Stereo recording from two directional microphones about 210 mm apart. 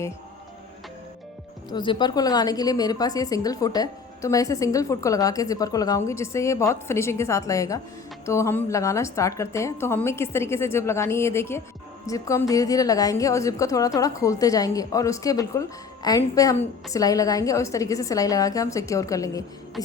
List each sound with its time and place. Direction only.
1.7 s a woman's voice: 20° left (ahead or behind)